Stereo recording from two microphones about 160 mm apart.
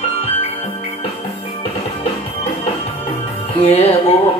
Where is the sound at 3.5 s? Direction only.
40° left (ahead or behind).